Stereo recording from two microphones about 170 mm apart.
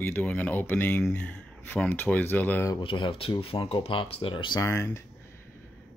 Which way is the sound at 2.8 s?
30° left (ahead or behind).